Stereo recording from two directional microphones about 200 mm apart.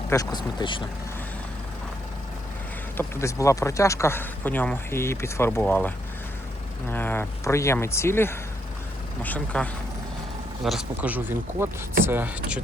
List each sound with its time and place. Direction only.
0.1 s speech: 20° left (ahead or behind)
3.0 s speech: 15° left (ahead or behind)
6.9 s speech: 10° left (ahead or behind); by 12.6 s 5° right (ahead or behind)